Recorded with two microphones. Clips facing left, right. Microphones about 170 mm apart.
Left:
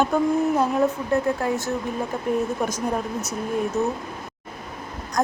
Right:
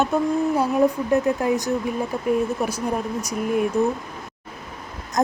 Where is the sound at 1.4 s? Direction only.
15° right (ahead or behind).